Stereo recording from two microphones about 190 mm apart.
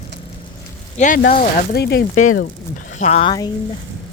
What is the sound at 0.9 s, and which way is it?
Speech, 40° left (ahead or behind).